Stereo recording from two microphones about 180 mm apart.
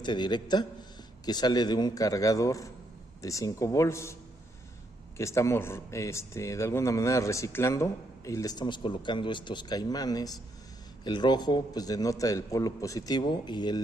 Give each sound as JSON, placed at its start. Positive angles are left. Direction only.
{"t": 0.0, "sound": "a man's voice", "side_deg": 25}